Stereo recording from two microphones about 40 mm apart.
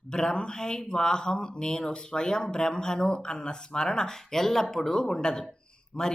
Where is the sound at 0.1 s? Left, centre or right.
Centre.